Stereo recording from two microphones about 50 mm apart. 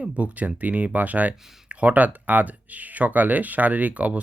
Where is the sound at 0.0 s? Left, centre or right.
Right.